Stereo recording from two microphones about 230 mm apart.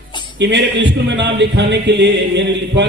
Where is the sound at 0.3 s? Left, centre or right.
Right.